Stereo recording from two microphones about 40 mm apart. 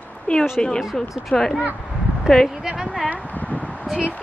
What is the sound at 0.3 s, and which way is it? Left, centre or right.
Speech, left.